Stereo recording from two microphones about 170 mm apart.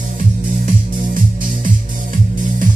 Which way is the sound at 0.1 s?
50° right (ahead or behind).